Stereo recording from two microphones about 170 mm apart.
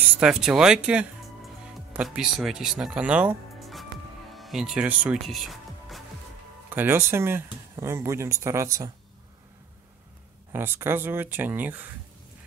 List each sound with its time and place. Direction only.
0.2 s speech: 5° right (ahead or behind)
5.2 s music: centre (ahead or behind)
6.7 s speech: 10° right (ahead or behind)
10.5 s speech: 15° right (ahead or behind)